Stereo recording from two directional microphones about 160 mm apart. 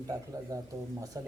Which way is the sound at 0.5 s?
20° right (ahead or behind).